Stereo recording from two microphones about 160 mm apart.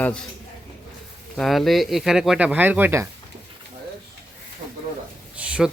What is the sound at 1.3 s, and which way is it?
Speech, centre (ahead or behind).